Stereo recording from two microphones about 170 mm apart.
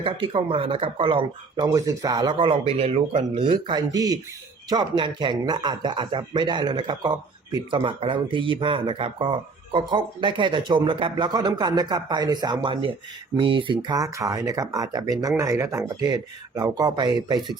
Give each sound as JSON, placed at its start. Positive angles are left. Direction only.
{"t": 0.0, "sound": "speech", "side_deg": -30}